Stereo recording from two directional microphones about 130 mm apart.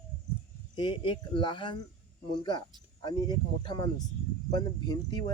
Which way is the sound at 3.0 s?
35° left (ahead or behind).